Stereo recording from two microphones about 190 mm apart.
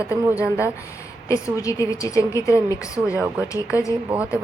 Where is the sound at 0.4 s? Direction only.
10° right (ahead or behind).